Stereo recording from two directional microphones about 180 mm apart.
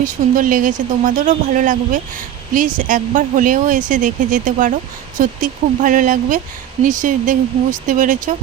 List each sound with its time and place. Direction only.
0.0 s speech: 50° right (ahead or behind)